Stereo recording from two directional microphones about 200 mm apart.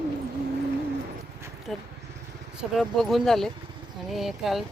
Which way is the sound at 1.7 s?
Centre (ahead or behind).